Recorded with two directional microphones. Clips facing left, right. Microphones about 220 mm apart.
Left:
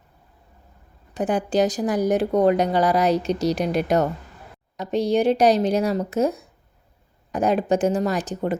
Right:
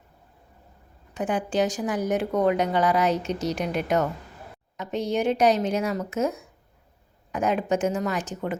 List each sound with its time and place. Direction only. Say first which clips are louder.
1.1 s speech: left 4 dB; 35° left (ahead or behind)